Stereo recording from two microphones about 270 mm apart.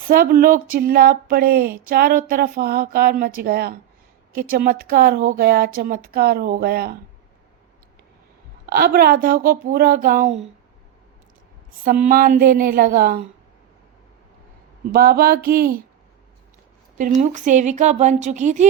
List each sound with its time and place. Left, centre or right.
0.1 s speech: right
8.7 s speech: right
11.9 s speech: right
14.9 s speech: right
17.0 s a woman's voice: right